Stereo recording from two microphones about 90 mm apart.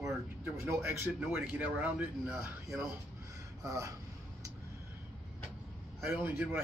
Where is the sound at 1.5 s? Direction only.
20° right (ahead or behind).